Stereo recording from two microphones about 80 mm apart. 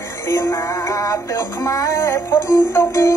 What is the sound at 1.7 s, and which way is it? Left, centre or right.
Music, left.